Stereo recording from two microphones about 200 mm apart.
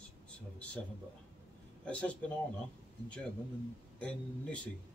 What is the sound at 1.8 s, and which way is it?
Speech, 5° left (ahead or behind).